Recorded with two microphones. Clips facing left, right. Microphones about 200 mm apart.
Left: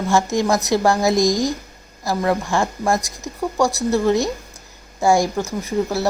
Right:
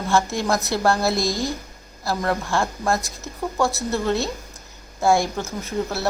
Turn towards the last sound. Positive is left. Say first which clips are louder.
# left 5 dB
turn(degrees=15)  # may be behind; listen again after turning